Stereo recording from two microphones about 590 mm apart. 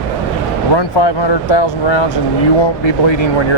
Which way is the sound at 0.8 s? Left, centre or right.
Left.